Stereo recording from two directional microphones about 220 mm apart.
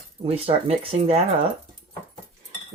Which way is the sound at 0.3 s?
25° right (ahead or behind).